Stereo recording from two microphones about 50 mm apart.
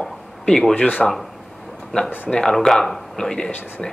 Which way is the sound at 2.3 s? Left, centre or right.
Centre.